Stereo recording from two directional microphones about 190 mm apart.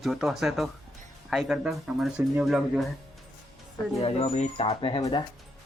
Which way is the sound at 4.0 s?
30° left (ahead or behind).